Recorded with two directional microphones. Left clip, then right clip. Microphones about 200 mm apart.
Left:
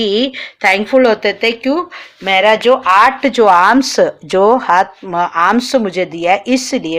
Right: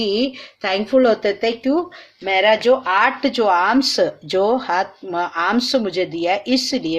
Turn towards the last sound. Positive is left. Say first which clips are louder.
# left 4 dB
turn(degrees=15)  # may be behind; listen again after turning